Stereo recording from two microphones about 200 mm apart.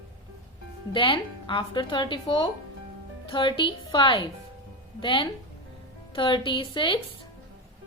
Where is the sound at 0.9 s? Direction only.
25° left (ahead or behind).